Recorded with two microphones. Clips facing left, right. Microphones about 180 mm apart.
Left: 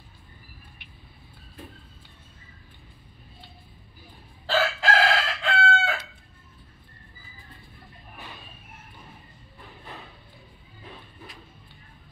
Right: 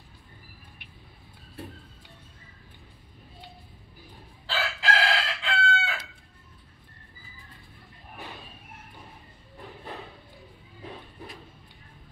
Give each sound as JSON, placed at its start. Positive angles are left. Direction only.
{"t": 4.5, "sound": "chicken", "side_deg": 45}